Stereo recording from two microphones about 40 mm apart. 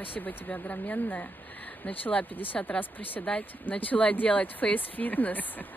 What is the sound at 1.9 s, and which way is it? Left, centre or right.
Speech, left.